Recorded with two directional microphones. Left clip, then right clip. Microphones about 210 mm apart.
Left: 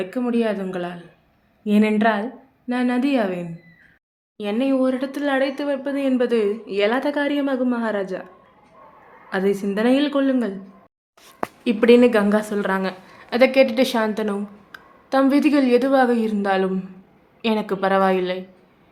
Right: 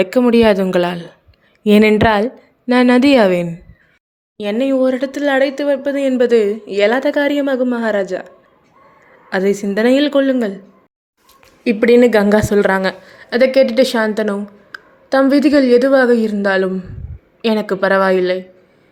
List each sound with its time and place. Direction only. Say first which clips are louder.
0.0 s a woman's voice: right 11 dB; 50° right (ahead or behind)
4.4 s speech: right 6 dB; 25° right (ahead or behind)
9.3 s speech: right 6 dB; 25° right (ahead or behind)
11.6 s a woman's voice: right 4 dB; 20° right (ahead or behind)
13.1 s speech: right 4 dB; 20° right (ahead or behind)